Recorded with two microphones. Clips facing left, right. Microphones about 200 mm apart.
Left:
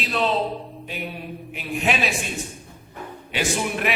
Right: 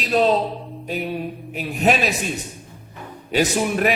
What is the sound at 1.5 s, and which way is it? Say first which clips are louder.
Speech: right 5 dB; 40° right (ahead or behind).